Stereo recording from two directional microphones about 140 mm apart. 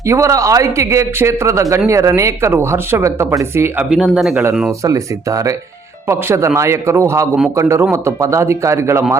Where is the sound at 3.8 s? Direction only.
5° right (ahead or behind).